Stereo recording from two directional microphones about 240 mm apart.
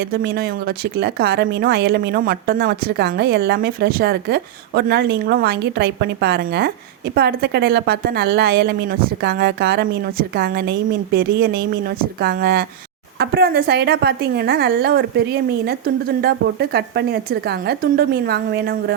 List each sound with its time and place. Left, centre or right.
0.1 s a woman's voice: right